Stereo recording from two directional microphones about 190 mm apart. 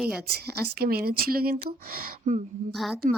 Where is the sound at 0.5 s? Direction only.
55° right (ahead or behind).